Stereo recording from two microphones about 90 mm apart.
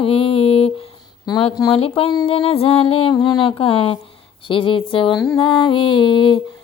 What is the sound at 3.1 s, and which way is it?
Speech, 50° left (ahead or behind).